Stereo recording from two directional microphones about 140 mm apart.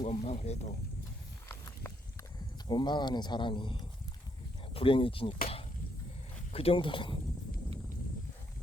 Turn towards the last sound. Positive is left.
turn(degrees=35)  # may be behind; listen again after turning